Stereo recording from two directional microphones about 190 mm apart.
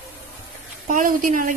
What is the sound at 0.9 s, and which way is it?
Speech, 45° right (ahead or behind).